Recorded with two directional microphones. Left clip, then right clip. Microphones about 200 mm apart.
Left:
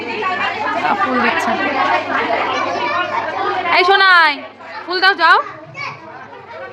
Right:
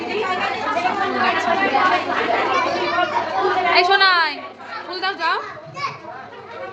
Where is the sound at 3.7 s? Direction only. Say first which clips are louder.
Left 5 dB; 30° left (ahead or behind).